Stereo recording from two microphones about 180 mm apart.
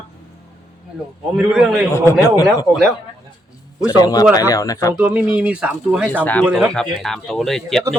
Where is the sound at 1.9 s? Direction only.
15° left (ahead or behind).